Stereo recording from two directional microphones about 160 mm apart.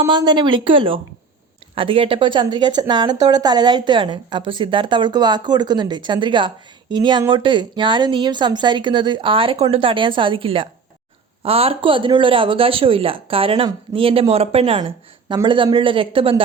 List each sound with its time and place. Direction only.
0.1 s a woman's voice: 30° right (ahead or behind)
14.8 s speech: 25° right (ahead or behind)